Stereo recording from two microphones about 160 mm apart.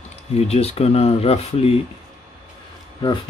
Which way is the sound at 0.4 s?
40° left (ahead or behind).